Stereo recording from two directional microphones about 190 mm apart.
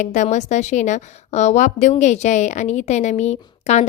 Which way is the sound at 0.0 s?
40° left (ahead or behind).